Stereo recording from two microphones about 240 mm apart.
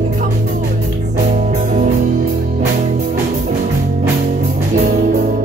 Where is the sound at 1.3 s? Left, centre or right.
Right.